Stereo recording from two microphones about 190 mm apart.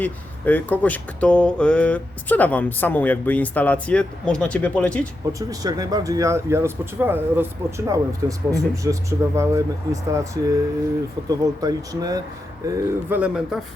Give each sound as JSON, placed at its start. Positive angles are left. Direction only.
{"t": 0.0, "sound": "speech", "side_deg": 10}
{"t": 5.4, "sound": "speech", "side_deg": -20}